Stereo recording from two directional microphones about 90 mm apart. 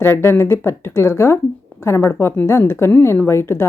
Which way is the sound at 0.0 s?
25° left (ahead or behind).